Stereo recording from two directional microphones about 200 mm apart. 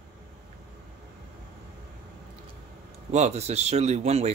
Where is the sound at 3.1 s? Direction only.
35° right (ahead or behind).